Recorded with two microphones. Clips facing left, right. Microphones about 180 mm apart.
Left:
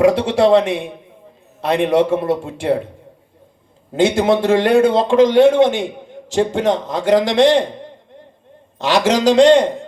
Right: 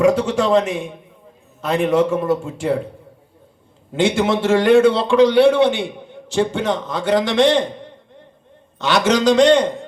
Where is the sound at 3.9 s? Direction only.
40° left (ahead or behind).